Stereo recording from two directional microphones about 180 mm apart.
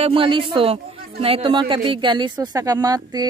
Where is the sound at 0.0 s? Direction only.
30° right (ahead or behind).